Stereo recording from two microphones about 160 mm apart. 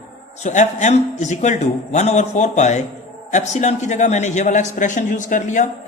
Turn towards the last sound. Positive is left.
turn(degrees=50)  # may be behind; listen again after turning